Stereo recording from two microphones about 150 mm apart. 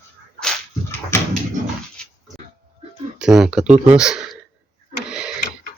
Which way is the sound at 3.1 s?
5° right (ahead or behind).